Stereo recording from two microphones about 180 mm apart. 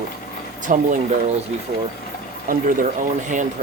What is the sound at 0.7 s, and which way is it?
Speech, 45° right (ahead or behind).